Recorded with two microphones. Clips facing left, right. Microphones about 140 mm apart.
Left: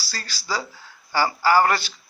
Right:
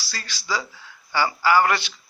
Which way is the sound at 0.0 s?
40° left (ahead or behind).